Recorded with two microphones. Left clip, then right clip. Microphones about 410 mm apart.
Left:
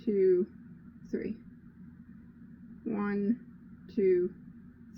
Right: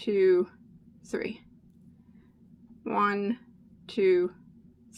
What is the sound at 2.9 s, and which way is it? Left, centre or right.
Speech, right.